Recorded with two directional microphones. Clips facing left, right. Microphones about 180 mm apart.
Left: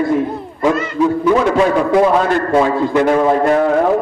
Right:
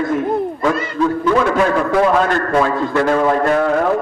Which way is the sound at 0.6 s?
15° left (ahead or behind).